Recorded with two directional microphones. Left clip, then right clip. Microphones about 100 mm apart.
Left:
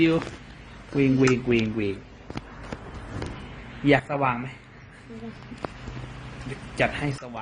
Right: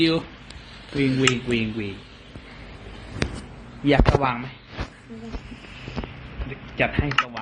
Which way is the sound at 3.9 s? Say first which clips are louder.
Right 4 dB; 5° left (ahead or behind).